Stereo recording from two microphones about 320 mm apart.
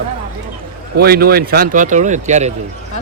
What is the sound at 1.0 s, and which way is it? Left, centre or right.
Speech, right.